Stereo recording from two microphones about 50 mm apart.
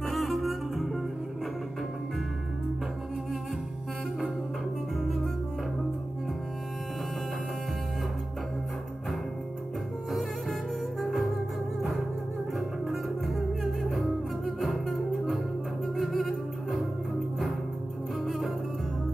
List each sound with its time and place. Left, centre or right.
0.1 s music: centre
11.0 s music: centre
12.5 s music: centre
14.6 s music: centre
18.2 s music: centre